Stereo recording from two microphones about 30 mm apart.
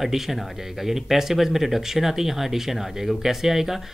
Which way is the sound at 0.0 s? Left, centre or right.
Centre.